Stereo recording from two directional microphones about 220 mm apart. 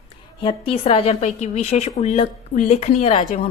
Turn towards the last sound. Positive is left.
turn(degrees=25)  # may be behind; listen again after turning